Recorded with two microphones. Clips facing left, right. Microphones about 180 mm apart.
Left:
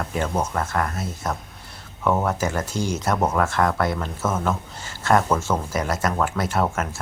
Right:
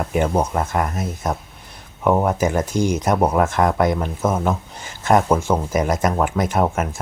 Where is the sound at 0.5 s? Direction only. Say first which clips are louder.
Right 3 dB; 20° right (ahead or behind).